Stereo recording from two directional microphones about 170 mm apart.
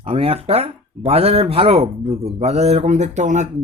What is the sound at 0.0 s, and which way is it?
Speech, 35° right (ahead or behind).